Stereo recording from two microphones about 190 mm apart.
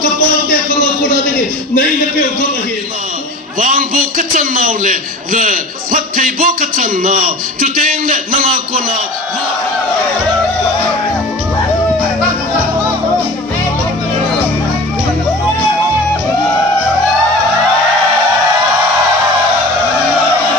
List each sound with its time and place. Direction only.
3.5 s a man's voice: 45° right (ahead or behind)